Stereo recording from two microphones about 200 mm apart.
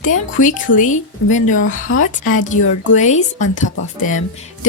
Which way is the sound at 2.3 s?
40° left (ahead or behind).